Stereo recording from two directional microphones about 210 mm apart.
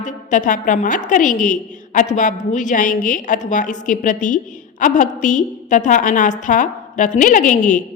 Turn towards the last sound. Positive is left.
turn(degrees=35)  # may be behind; listen again after turning